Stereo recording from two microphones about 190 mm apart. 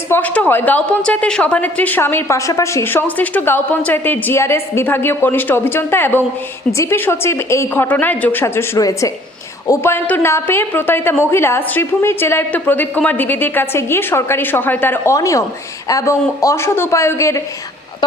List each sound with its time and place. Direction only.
0.1 s a woman's voice: 10° left (ahead or behind)